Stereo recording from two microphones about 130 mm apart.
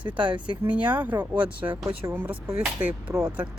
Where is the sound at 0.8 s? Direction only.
15° right (ahead or behind).